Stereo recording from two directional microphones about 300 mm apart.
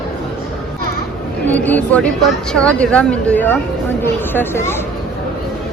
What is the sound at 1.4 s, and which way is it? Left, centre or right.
A woman's voice, centre.